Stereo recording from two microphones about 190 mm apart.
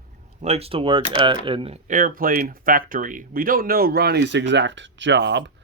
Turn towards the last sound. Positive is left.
turn(degrees=-65)  # may be behind; listen again after turning